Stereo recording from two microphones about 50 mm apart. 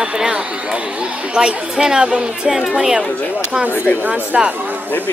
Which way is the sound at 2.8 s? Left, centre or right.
Centre.